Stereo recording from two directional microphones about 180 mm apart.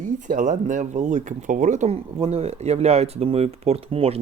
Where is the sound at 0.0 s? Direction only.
45° right (ahead or behind).